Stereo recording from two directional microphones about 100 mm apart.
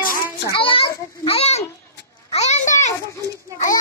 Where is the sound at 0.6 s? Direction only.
65° left (ahead or behind); by 1.6 s 85° left.